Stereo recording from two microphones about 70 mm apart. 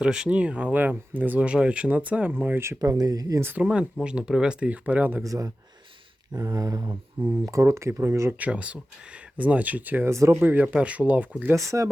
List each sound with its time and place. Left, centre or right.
0.0 s speech: centre
2.6 s speech: right
2.9 s speech: right
3.6 s speech: centre
5.2 s speech: right
6.3 s speech: right
6.8 s speech: right
7.4 s speech: right
8.4 s speech: centre
10.1 s speech: right
10.4 s speech: right
11.5 s speech: right